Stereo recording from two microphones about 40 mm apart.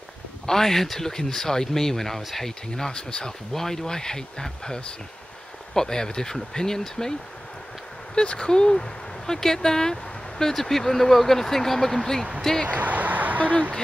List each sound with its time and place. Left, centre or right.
0.5 s speech: centre
2.7 s speech: centre
3.5 s speech: centre
12.6 s speech: right